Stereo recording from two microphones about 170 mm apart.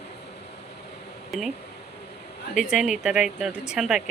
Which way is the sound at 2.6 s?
5° right (ahead or behind).